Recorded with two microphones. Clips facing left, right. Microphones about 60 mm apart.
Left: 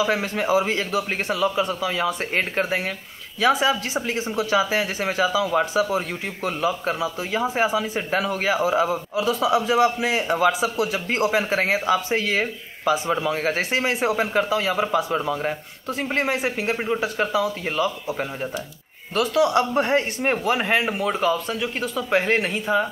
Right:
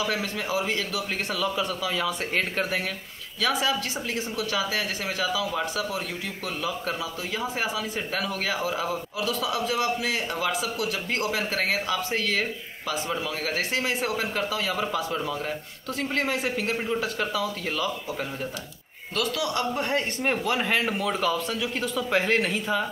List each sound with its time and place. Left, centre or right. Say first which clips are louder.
0.0 s speech: left 6 dB; left
19.1 s speech: left 8 dB; left